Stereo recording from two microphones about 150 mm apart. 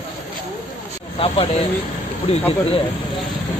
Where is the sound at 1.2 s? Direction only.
40° left (ahead or behind).